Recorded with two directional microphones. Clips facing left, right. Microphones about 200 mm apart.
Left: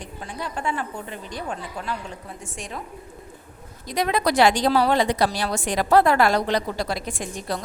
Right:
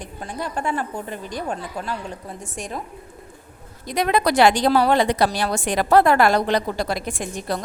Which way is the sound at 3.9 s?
60° right (ahead or behind).